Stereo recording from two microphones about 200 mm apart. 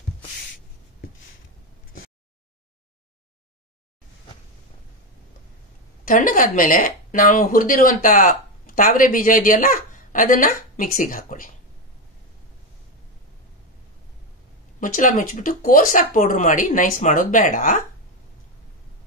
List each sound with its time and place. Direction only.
6.0 s speech: 40° left (ahead or behind)
14.8 s speech: 40° left (ahead or behind)